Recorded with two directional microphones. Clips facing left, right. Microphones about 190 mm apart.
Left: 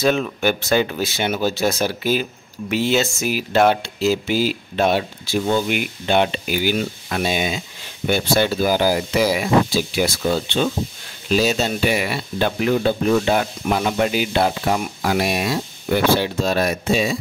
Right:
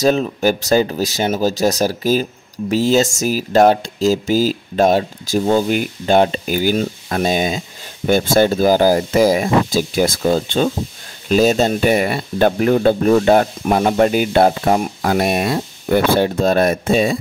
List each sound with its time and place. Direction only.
0.0 s speech: 35° right (ahead or behind); by 17.2 s 55° right (ahead or behind)